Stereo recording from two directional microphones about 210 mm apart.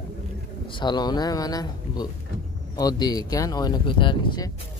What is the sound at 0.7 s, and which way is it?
Speech, 20° left (ahead or behind).